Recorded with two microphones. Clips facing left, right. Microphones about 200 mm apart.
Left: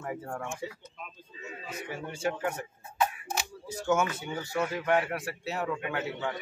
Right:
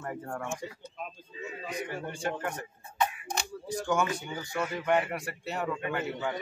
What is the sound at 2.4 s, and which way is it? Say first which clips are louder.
Camera: left 3 dB; 5° left (ahead or behind).